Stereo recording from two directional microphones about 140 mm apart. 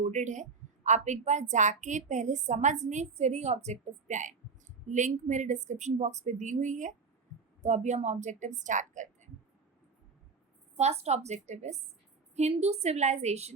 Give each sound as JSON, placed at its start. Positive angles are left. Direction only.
{"t": 0.0, "sound": "a woman's voice", "side_deg": -60}
{"t": 10.8, "sound": "a woman's voice", "side_deg": -50}